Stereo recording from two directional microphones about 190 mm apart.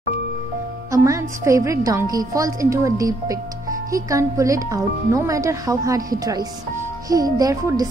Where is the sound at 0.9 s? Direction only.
15° right (ahead or behind).